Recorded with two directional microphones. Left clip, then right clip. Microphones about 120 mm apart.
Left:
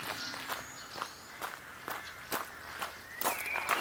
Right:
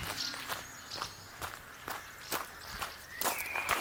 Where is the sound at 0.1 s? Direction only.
70° right (ahead or behind).